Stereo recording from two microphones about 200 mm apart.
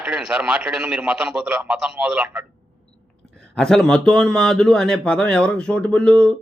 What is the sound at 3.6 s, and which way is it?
A man's voice, 5° left (ahead or behind).